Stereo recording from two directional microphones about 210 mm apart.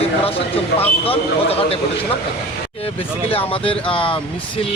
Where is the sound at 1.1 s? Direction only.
25° left (ahead or behind).